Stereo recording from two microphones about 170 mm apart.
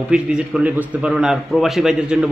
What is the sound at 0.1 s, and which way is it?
A man's voice, 5° right (ahead or behind).